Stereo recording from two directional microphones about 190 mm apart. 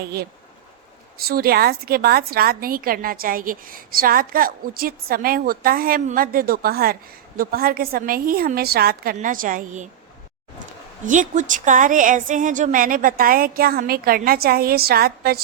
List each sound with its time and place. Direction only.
1.2 s a woman's voice: 55° right (ahead or behind)
9.1 s a woman's voice: 45° right (ahead or behind)
11.0 s a woman's voice: 45° right (ahead or behind)